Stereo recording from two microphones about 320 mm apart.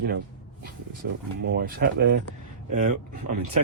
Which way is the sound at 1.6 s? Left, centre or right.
Right.